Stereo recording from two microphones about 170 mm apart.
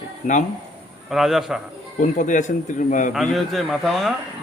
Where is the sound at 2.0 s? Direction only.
50° left (ahead or behind).